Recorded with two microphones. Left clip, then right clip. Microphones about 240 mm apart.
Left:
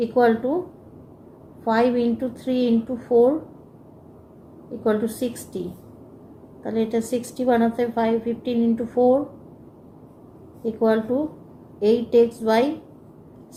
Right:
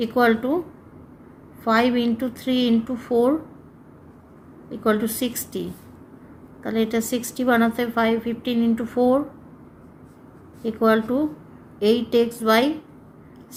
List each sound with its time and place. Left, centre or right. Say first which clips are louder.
0.0 s a woman's voice: left 1 dB; right
1.6 s a woman's voice: even; right
4.8 s a woman's voice: even; right
10.6 s a woman's voice: right 1 dB; right